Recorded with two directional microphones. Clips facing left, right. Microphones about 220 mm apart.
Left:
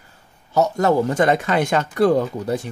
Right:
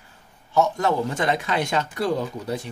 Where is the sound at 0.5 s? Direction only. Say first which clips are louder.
Left 4 dB; 45° left (ahead or behind).